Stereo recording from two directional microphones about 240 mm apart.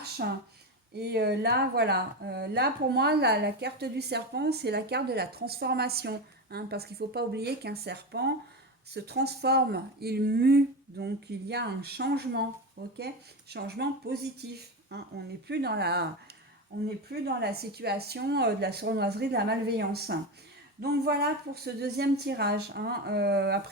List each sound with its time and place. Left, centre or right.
0.2 s speech: right
17.1 s speech: right